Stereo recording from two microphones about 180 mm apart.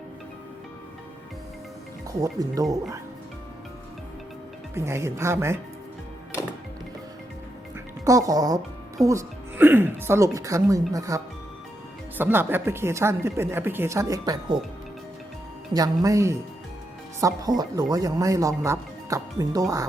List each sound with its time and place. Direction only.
2.2 s speech: 20° right (ahead or behind)
4.7 s speech: 15° right (ahead or behind)
8.0 s speech: 20° right (ahead or behind)
15.7 s speech: 20° right (ahead or behind)